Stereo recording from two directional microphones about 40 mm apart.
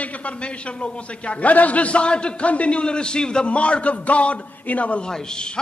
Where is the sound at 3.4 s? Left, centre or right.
Left.